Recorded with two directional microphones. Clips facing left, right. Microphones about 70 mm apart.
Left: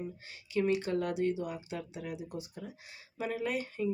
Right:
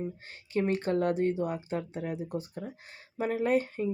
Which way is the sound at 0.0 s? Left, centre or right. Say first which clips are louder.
Right 4 dB; right.